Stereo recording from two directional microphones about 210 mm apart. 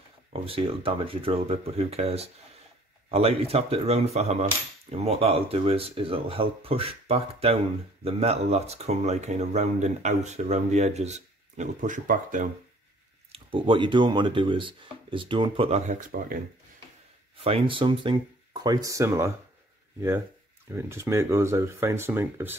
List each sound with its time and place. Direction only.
0.3 s speech: 25° right (ahead or behind)
13.3 s speech: 25° right (ahead or behind); by 16.3 s 40° right (ahead or behind)
17.4 s speech: 25° right (ahead or behind)
20.7 s speech: 10° right (ahead or behind)